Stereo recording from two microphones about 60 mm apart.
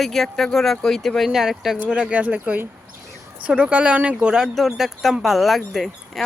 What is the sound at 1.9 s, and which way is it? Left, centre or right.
Speech, centre.